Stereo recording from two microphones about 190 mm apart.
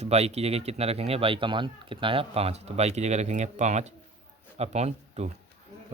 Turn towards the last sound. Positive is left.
turn(degrees=-35)  # may be behind; listen again after turning